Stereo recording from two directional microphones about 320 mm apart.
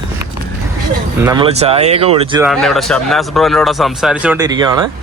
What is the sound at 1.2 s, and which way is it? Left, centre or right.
Speech, centre.